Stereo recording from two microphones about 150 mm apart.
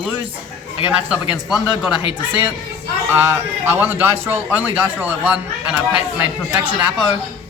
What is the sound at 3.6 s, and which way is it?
A man's voice, 15° right (ahead or behind).